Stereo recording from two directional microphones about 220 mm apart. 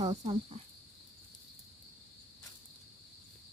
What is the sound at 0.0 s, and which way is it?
Speech, 25° right (ahead or behind).